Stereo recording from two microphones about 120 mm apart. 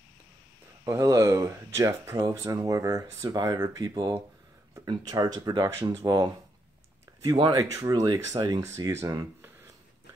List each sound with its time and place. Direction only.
0.8 s speech: 30° right (ahead or behind)